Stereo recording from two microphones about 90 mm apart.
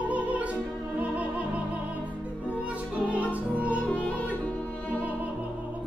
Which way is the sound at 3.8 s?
15° left (ahead or behind).